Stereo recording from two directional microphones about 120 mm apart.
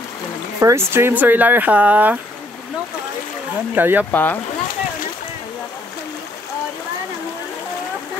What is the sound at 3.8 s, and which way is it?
Speech, 15° right (ahead or behind).